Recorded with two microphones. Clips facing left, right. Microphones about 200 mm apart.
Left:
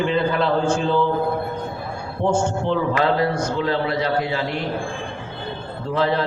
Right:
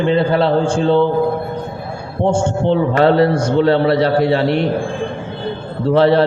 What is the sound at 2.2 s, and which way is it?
A man's voice, 25° right (ahead or behind).